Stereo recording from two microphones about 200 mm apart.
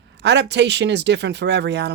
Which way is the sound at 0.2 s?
55° right (ahead or behind).